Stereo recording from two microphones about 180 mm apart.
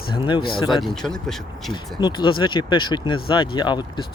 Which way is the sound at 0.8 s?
5° left (ahead or behind).